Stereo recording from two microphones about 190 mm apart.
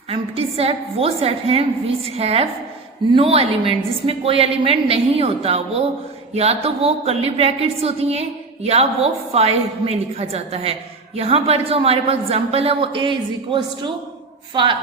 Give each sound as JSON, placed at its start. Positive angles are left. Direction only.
{"t": 0.1, "sound": "a woman's voice", "side_deg": -30}